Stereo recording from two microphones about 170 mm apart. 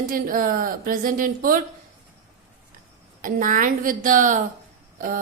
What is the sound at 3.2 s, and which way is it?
A woman's voice, 55° right (ahead or behind).